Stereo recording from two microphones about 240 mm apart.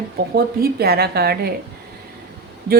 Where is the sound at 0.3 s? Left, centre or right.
Right.